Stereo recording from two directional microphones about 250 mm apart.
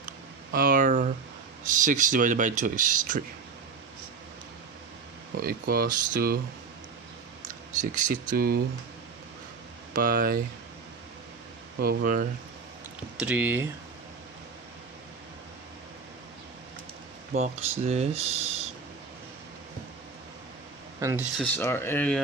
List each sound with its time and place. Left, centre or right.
0.5 s a sound: right
1.7 s speech: right
5.4 s speech: right
7.4 s speech: right
9.9 s speech: right
11.8 s speech: right
13.1 s speech: centre
17.3 s speech: right
21.0 s speech: centre
21.3 s speech: centre